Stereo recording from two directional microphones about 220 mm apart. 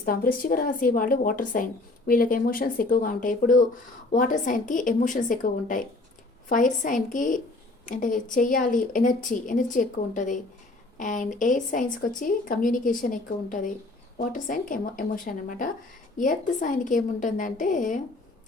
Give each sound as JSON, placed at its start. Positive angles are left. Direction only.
{"t": 0.0, "sound": "speech", "side_deg": 40}
{"t": 6.8, "sound": "speech", "side_deg": 35}